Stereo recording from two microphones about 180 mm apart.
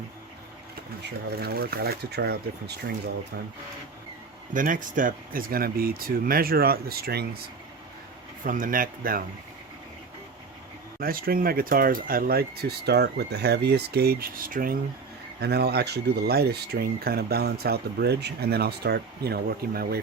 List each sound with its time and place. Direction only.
1.4 s speech: 60° right (ahead or behind)
4.5 s speech: 45° right (ahead or behind)
8.4 s speech: 50° right (ahead or behind)
11.0 s speech: 55° right (ahead or behind)
15.4 s speech: 65° right (ahead or behind)